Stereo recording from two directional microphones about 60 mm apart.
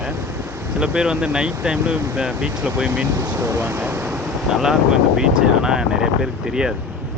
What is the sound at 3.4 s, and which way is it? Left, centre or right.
Speech, right.